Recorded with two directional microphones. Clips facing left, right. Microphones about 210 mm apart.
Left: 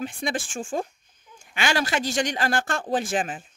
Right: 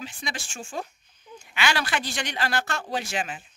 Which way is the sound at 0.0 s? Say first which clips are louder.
Left 8 dB; 50° left (ahead or behind).